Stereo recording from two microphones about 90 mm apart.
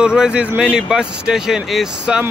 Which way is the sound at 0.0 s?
10° right (ahead or behind).